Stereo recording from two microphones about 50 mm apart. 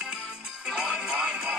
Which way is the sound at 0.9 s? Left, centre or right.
Centre.